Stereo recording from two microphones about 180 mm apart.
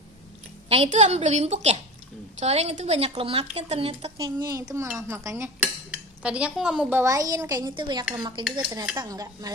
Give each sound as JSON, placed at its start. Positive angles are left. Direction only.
{"t": 0.7, "sound": "speech", "side_deg": -35}
{"t": 4.2, "sound": "a woman's voice", "side_deg": -20}
{"t": 5.0, "sound": "dishes", "side_deg": -15}
{"t": 8.1, "sound": "a woman's voice", "side_deg": -25}